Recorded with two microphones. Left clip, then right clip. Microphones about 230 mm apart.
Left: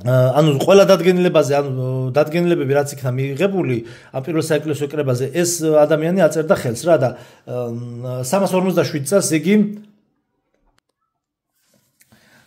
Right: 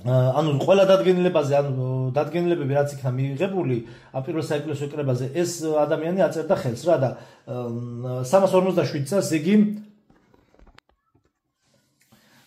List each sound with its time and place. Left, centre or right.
0.0 s a man's voice: left